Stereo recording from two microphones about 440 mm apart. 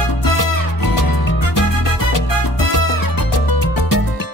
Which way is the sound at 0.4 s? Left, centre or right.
Left.